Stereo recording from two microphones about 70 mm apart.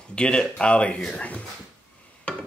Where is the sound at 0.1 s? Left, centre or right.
Centre.